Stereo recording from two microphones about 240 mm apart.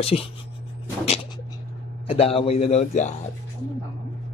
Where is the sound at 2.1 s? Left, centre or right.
Left.